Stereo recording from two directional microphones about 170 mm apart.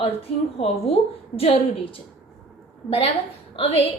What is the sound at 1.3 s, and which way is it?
Speech, 35° left (ahead or behind).